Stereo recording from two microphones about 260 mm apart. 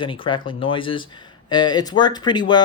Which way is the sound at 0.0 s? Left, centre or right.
Centre.